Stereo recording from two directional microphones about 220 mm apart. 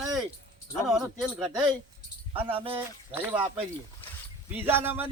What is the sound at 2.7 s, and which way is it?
Speech, 10° right (ahead or behind).